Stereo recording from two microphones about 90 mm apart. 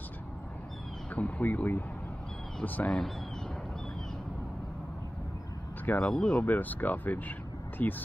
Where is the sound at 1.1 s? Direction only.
15° left (ahead or behind).